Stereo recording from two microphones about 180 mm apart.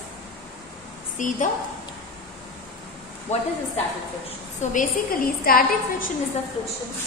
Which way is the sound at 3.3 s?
35° left (ahead or behind).